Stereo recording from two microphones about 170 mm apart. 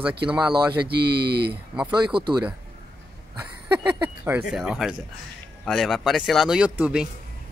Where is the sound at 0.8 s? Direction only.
70° right (ahead or behind).